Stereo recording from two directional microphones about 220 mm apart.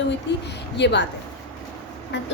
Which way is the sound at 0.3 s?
55° left (ahead or behind).